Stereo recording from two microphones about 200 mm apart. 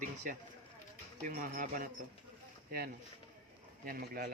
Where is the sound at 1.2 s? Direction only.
45° right (ahead or behind).